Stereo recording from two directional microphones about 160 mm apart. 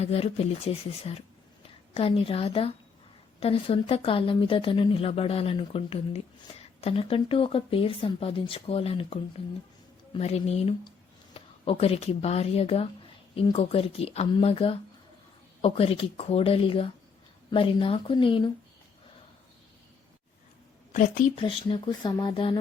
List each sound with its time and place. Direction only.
0.0 s a woman's voice: 40° left (ahead or behind)
21.3 s speech: 30° left (ahead or behind)